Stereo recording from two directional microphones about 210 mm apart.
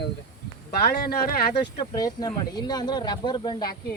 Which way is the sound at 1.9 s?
15° left (ahead or behind).